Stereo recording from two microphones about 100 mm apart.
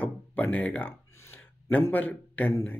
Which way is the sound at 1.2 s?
25° left (ahead or behind).